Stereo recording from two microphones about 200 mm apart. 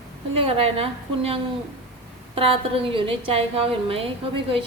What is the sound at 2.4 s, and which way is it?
Speech, 30° right (ahead or behind).